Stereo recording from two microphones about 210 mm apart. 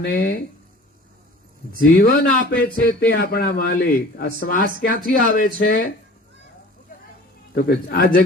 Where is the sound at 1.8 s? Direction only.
45° left (ahead or behind).